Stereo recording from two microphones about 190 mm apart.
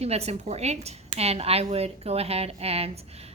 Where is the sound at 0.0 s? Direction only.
35° right (ahead or behind).